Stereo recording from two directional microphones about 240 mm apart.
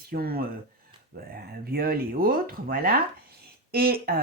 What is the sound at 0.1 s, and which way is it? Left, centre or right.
Speech, right.